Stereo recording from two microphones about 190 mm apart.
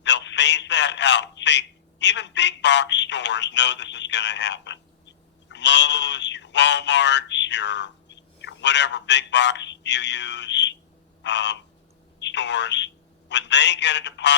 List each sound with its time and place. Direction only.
0.0 s speech: 65° left (ahead or behind)
11.2 s frog: 65° left (ahead or behind)
12.2 s speech: 65° left (ahead or behind)